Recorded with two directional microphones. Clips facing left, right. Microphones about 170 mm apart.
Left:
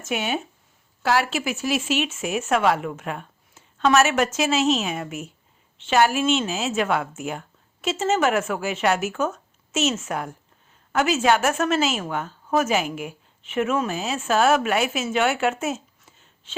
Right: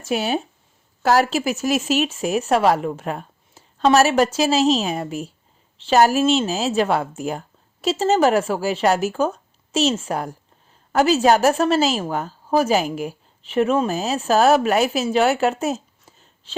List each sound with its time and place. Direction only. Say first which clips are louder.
0.0 s a woman's voice: right 4 dB; 35° right (ahead or behind)